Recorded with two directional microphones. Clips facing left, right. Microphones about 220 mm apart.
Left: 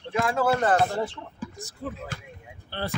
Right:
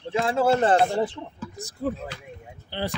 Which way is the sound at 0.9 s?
15° right (ahead or behind).